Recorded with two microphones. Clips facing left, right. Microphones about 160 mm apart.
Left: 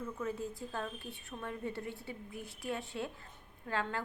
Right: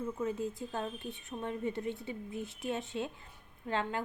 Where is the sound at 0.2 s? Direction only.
20° right (ahead or behind).